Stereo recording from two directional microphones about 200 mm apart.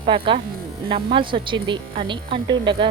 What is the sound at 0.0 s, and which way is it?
A woman's voice, 25° right (ahead or behind).